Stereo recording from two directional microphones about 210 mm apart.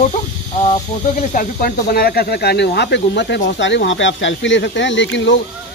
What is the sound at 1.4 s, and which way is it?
Speech, 40° left (ahead or behind).